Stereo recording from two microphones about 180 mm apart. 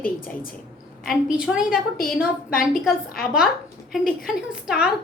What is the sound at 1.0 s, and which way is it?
Speech, centre (ahead or behind).